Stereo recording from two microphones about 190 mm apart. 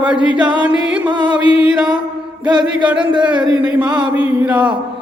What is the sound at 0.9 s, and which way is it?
Music, 5° right (ahead or behind).